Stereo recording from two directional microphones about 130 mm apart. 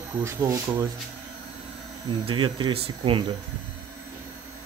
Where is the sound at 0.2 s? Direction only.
20° right (ahead or behind).